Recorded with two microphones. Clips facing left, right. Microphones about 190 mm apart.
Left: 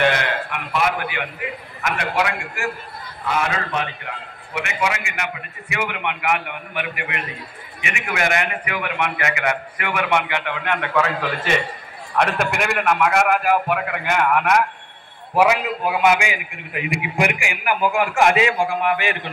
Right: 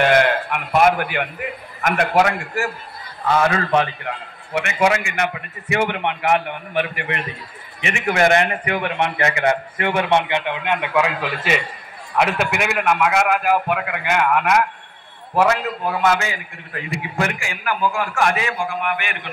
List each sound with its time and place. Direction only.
0.0 s a sound: 50° right (ahead or behind)
1.8 s a man's voice: 50° right (ahead or behind)
4.8 s a man's voice: 40° right (ahead or behind); by 14.6 s centre (ahead or behind)
15.3 s a man's voice: 10° left (ahead or behind); by 19.1 s 30° left (ahead or behind)